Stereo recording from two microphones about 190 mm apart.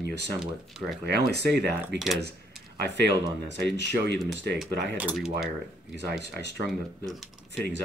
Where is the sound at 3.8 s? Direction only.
65° right (ahead or behind).